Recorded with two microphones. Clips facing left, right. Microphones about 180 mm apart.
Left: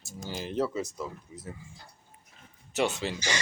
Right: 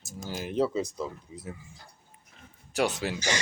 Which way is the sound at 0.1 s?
10° right (ahead or behind).